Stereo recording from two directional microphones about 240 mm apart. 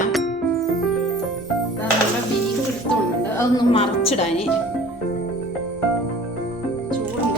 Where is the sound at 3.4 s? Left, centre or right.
Left.